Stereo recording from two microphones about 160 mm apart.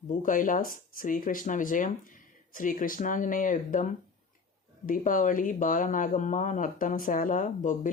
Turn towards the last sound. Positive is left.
turn(degrees=55)  # may be behind; listen again after turning